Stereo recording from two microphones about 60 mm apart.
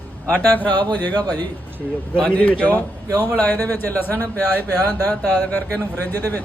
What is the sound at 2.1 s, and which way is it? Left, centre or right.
Speech, centre.